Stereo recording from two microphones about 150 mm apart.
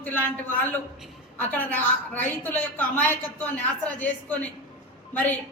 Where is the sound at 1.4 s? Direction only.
10° left (ahead or behind).